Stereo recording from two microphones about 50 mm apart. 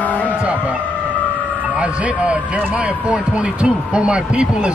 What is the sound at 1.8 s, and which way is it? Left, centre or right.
Speech, right.